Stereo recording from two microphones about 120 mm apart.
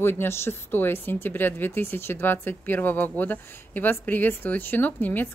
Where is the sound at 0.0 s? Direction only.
20° left (ahead or behind).